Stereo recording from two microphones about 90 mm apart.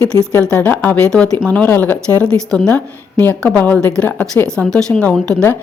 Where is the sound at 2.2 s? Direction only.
10° left (ahead or behind).